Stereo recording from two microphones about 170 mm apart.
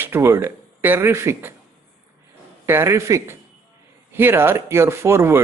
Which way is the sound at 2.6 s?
15° right (ahead or behind).